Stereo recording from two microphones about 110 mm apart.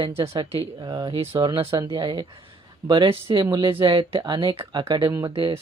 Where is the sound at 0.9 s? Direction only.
35° right (ahead or behind).